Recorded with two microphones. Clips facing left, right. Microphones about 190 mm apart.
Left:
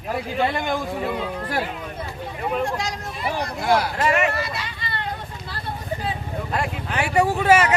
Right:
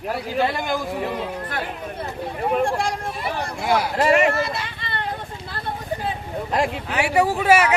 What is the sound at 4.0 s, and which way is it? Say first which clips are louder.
Vehicle: right 4 dB; 40° right (ahead or behind).